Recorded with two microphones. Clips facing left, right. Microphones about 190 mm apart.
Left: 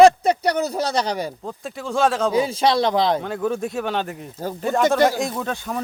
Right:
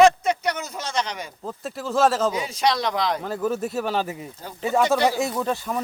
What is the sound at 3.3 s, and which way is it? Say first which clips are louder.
Speech: left 1 dB; 5° right (ahead or behind).